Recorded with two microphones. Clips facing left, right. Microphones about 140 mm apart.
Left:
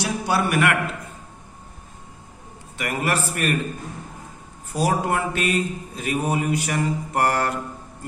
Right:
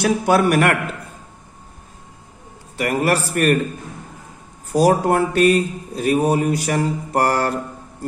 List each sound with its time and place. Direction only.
0.0 s a man's voice: 50° right (ahead or behind)
2.8 s speech: 40° right (ahead or behind)
4.7 s speech: 45° right (ahead or behind)